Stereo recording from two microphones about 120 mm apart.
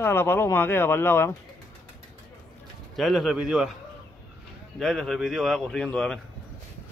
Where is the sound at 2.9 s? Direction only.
Centre (ahead or behind).